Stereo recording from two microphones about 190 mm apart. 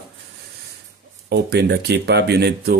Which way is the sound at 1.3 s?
60° right (ahead or behind).